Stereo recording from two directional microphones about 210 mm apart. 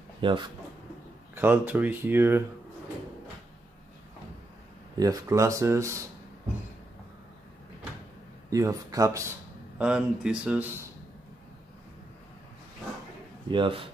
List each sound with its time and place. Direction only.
0.2 s speech: 25° right (ahead or behind)
1.3 s speech: 10° right (ahead or behind)
4.9 s speech: 15° right (ahead or behind)
8.5 s speech: 15° right (ahead or behind)
9.8 s speech: 5° right (ahead or behind)
13.5 s speech: 25° right (ahead or behind)